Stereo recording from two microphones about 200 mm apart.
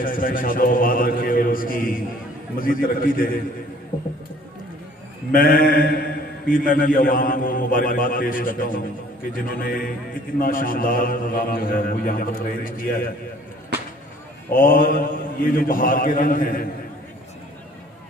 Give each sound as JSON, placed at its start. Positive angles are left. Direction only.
{"t": 0.0, "sound": "speech", "side_deg": 45}
{"t": 5.3, "sound": "speech", "side_deg": 45}
{"t": 14.5, "sound": "speech", "side_deg": 45}